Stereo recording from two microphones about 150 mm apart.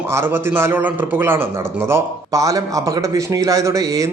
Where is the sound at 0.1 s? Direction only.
15° right (ahead or behind).